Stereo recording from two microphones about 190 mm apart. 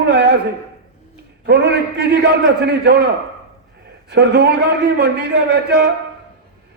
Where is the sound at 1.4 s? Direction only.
65° right (ahead or behind).